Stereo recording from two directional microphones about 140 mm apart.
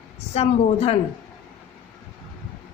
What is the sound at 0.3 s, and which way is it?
Speech, 45° left (ahead or behind).